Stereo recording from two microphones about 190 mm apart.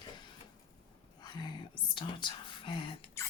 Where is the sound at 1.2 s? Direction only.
25° left (ahead or behind).